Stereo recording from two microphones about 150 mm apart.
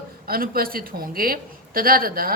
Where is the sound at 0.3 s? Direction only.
75° right (ahead or behind).